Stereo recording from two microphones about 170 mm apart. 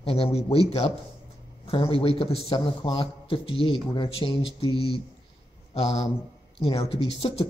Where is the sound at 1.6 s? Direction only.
35° left (ahead or behind).